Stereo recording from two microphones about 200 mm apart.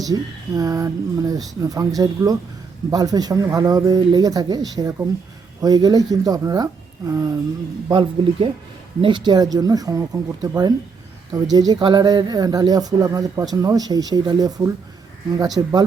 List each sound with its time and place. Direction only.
0.0 s speech: 15° right (ahead or behind)